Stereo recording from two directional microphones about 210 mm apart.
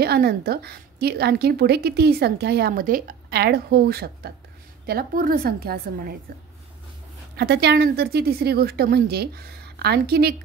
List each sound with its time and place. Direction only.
0.0 s a woman's voice: 50° right (ahead or behind)
7.3 s a woman's voice: 50° right (ahead or behind)